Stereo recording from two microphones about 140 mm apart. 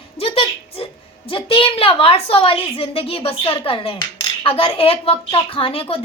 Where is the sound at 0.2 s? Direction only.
45° left (ahead or behind).